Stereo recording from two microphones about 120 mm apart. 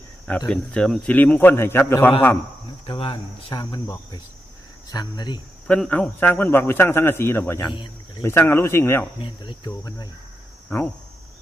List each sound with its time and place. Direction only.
0.3 s a man's voice: 5° left (ahead or behind)
2.8 s speech: 45° left (ahead or behind)
4.9 s speech: 35° left (ahead or behind)
5.6 s a man's voice: 10° left (ahead or behind)
7.7 s cricket: 45° left (ahead or behind)
8.2 s speech: 20° left (ahead or behind)
9.2 s cricket: 45° left (ahead or behind)
9.6 s speech: 35° left (ahead or behind)
10.7 s speech: 15° left (ahead or behind)